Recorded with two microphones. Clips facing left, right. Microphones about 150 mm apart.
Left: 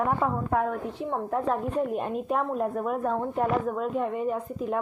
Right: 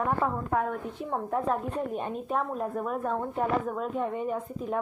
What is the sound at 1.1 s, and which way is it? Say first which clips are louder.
Speech: left 1 dB; 30° left (ahead or behind).